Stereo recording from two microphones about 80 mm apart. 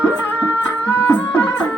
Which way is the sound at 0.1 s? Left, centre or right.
Left.